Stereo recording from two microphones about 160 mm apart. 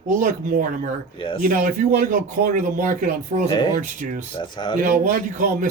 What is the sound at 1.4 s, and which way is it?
A man's voice, 60° right (ahead or behind).